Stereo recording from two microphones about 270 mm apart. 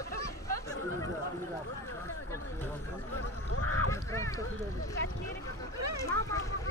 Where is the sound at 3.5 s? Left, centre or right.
Left.